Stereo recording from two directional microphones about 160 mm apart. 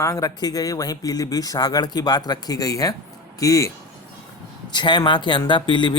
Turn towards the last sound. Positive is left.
turn(degrees=30)  # may be behind; listen again after turning